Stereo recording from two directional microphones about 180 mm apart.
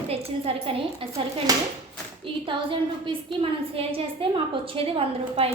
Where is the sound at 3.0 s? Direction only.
30° right (ahead or behind).